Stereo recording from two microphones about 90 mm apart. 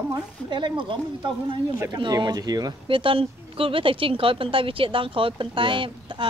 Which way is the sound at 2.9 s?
75° right (ahead or behind).